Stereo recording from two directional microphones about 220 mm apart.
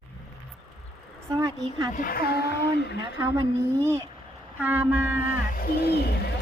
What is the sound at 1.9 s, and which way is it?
Speech, 40° left (ahead or behind).